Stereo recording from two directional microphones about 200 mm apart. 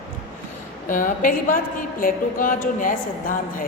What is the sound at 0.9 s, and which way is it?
A woman's voice, 40° left (ahead or behind).